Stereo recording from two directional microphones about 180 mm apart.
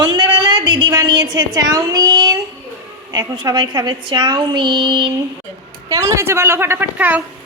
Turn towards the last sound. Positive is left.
turn(degrees=-10)  # may be behind; listen again after turning